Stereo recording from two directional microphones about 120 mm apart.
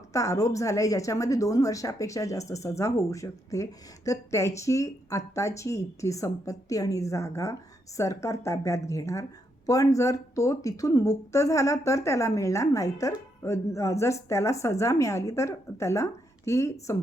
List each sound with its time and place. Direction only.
0.1 s speech: 25° left (ahead or behind)